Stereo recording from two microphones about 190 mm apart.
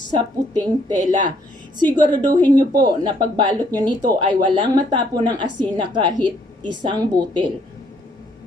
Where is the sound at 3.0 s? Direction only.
25° right (ahead or behind).